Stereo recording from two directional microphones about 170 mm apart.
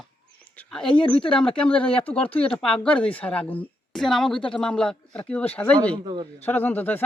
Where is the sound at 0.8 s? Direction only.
30° left (ahead or behind).